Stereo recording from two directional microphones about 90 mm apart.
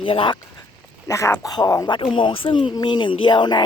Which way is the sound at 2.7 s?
55° left (ahead or behind).